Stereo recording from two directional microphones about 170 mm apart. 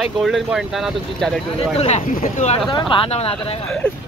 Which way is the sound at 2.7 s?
30° left (ahead or behind).